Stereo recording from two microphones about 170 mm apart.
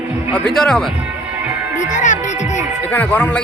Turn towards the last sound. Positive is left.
turn(degrees=10)  # may be behind; listen again after turning